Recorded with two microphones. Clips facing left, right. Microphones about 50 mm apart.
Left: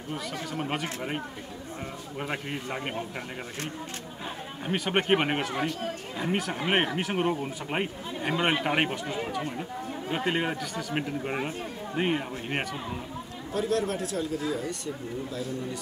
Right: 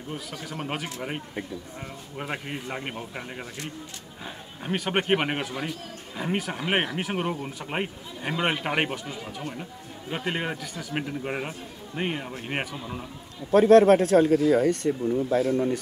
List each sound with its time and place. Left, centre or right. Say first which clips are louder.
0.5 s a man's voice: even; centre
2.1 s a man's voice: even; centre
4.6 s a man's voice: even; centre
13.5 s speech: right 13 dB; right